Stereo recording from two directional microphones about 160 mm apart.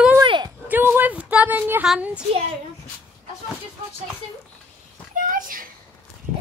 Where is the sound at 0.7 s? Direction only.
10° right (ahead or behind).